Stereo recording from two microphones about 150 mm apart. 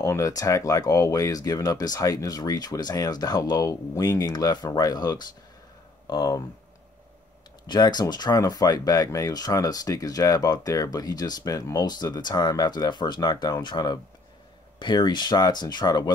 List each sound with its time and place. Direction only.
0.0 s speech: 20° left (ahead or behind)
7.6 s speech: 30° left (ahead or behind)